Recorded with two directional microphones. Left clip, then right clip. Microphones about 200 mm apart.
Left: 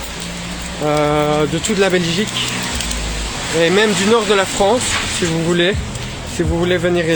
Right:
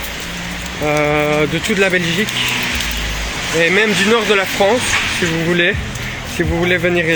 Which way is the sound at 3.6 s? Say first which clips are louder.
Right 1 dB; 10° left (ahead or behind).